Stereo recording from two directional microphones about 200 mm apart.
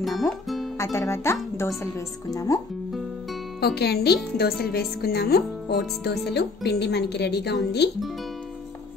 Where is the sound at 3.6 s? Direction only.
55° left (ahead or behind).